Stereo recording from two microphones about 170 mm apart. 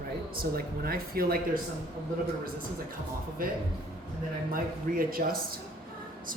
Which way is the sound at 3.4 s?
55° right (ahead or behind).